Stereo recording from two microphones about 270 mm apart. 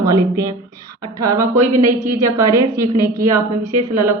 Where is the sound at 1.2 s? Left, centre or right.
Centre.